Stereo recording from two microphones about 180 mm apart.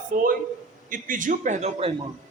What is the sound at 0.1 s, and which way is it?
A man's voice, 50° right (ahead or behind).